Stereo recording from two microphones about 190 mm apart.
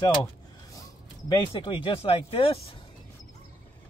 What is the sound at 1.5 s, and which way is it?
Speech, 25° left (ahead or behind).